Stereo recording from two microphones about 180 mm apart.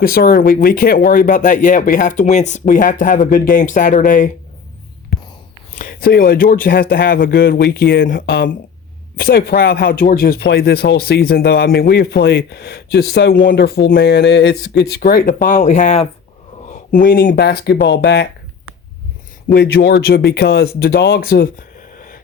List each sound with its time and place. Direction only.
0.0 s speech: 55° left (ahead or behind)
5.8 s speech: 55° left (ahead or behind)
15.4 s speech: 45° left (ahead or behind); by 18.3 s 75° left (ahead or behind)
19.5 s speech: 65° left (ahead or behind)